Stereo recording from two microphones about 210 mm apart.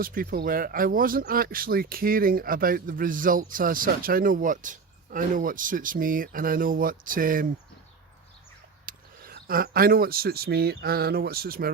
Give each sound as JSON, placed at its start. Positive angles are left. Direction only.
{"t": 0.0, "sound": "speech", "side_deg": -45}
{"t": 8.9, "sound": "speech", "side_deg": -45}